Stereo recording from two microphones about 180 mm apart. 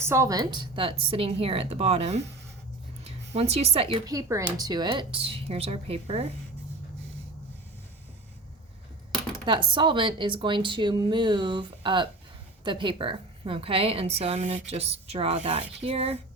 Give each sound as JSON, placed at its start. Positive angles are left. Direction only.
{"t": 0.0, "sound": "a woman's voice", "side_deg": -15}
{"t": 4.1, "sound": "a woman's voice", "side_deg": -20}
{"t": 9.5, "sound": "a woman's voice", "side_deg": -25}